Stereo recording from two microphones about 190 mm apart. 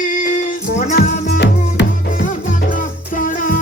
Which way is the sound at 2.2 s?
45° left (ahead or behind).